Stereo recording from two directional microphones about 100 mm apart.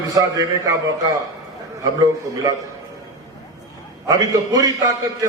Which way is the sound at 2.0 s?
35° right (ahead or behind).